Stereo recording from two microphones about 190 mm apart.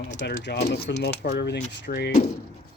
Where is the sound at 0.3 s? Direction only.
60° left (ahead or behind).